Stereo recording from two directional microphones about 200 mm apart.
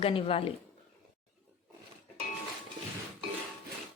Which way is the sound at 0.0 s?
30° left (ahead or behind).